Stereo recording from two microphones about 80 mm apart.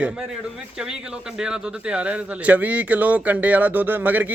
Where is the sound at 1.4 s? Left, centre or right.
Centre.